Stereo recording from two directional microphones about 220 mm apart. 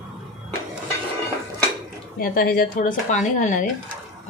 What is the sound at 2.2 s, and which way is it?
Speech, 45° left (ahead or behind).